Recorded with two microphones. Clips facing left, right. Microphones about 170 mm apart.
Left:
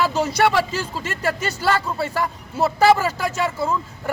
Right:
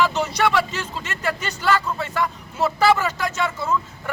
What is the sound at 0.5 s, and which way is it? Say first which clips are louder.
Speech: left 1 dB; 35° left (ahead or behind).